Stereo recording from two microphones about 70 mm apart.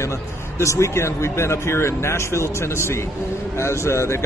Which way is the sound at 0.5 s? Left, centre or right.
Left.